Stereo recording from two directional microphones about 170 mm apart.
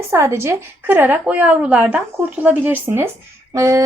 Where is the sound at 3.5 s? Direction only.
20° right (ahead or behind).